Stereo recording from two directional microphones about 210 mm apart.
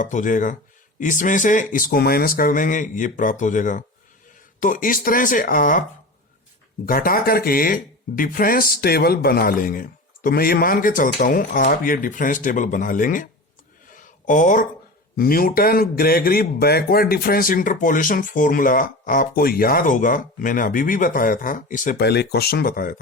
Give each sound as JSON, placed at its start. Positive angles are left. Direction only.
{"t": 0.0, "sound": "a man's voice", "side_deg": 40}
{"t": 6.8, "sound": "a man's voice", "side_deg": 45}
{"t": 13.9, "sound": "a sound", "side_deg": 35}
{"t": 15.1, "sound": "a man's voice", "side_deg": 45}
{"t": 22.0, "sound": "speech", "side_deg": 50}